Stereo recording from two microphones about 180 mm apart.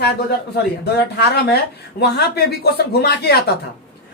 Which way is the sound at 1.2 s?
60° left (ahead or behind).